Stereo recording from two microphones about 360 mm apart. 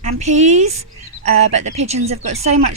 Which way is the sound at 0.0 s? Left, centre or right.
Centre.